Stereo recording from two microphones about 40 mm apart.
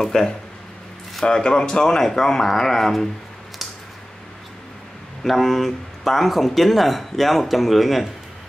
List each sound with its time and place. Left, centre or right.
0.0 s speech: centre
5.2 s speech: centre